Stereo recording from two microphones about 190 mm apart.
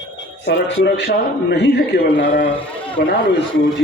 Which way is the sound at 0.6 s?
65° left (ahead or behind).